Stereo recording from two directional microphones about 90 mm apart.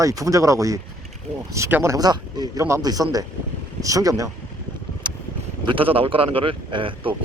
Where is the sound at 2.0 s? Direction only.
50° right (ahead or behind).